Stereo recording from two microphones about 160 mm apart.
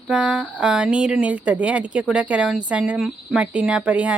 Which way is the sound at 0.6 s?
5° right (ahead or behind).